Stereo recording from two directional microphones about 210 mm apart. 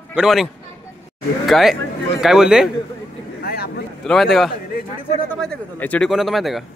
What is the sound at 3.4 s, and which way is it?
Vehicle, 50° left (ahead or behind).